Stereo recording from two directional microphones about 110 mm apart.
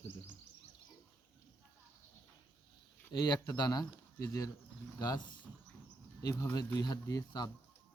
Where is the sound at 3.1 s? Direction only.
40° left (ahead or behind).